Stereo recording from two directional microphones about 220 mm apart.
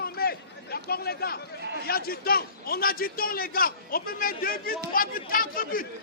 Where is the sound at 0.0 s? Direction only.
45° left (ahead or behind).